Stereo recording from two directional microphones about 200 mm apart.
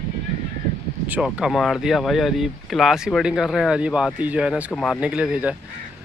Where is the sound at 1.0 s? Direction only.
5° right (ahead or behind).